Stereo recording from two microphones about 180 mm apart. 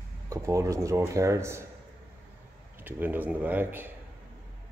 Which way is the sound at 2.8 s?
10° right (ahead or behind).